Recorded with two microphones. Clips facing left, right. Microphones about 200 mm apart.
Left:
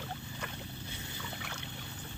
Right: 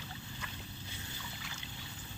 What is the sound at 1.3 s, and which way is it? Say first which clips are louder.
Boat: left 5 dB; 65° left (ahead or behind).